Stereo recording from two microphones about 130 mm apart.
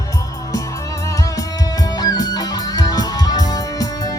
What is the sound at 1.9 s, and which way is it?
Music, 30° left (ahead or behind).